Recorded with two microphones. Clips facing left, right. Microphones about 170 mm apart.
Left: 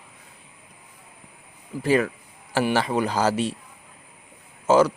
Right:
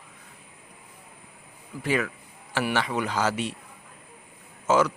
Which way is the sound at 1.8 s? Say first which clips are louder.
Left 6 dB; 35° left (ahead or behind).